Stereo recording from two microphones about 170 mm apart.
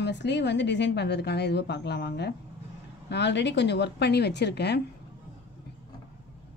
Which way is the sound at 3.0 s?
90° left.